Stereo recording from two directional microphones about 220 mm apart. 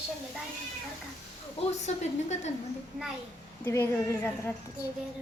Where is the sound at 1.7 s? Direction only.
30° left (ahead or behind).